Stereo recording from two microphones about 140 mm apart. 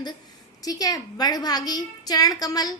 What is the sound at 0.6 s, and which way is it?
A woman's voice, 25° left (ahead or behind).